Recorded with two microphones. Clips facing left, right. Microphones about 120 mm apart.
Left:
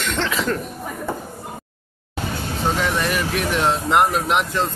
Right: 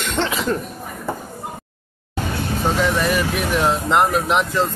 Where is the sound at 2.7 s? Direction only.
Centre (ahead or behind).